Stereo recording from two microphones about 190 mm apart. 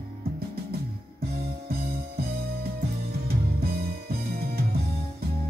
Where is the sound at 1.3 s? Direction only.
55° right (ahead or behind).